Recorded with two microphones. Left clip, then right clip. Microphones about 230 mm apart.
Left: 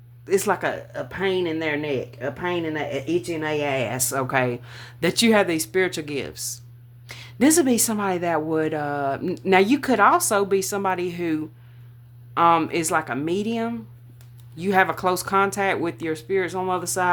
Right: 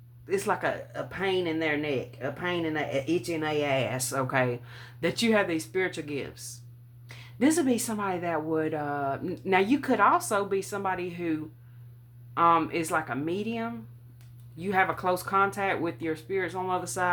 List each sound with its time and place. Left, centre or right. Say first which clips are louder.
0.3 s speech: left 6 dB; left